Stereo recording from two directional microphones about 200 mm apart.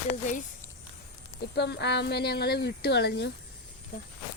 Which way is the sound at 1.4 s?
55° left (ahead or behind).